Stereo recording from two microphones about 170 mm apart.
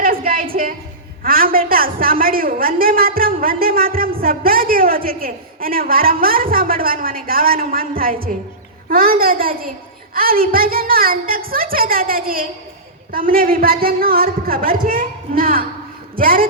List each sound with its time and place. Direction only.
0.0 s music: 55° right (ahead or behind)
1.2 s a man's voice: 60° right (ahead or behind)